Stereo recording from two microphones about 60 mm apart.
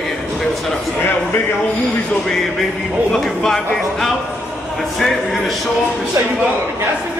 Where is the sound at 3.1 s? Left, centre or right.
Centre.